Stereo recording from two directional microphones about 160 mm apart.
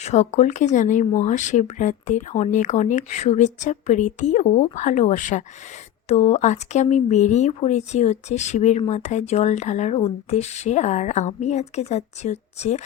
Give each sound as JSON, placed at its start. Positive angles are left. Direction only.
{"t": 0.0, "sound": "speech", "side_deg": 45}